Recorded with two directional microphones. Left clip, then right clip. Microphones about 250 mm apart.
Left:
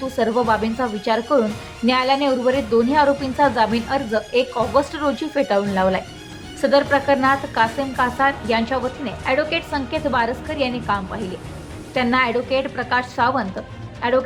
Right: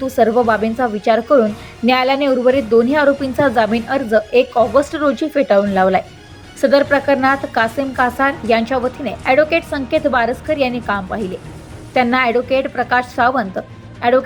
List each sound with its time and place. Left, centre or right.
0.2 s a woman's voice: centre